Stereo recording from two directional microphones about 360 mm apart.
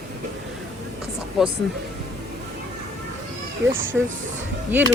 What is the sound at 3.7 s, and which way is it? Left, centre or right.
Speech, right.